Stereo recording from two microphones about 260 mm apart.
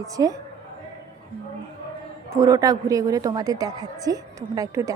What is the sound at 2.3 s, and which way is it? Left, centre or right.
A woman's voice, centre.